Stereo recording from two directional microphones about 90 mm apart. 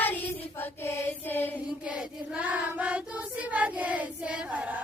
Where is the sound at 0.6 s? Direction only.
25° left (ahead or behind).